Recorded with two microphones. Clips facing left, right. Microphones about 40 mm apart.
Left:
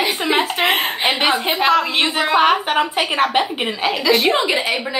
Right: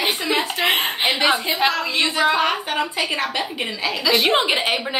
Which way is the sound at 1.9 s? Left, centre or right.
Left.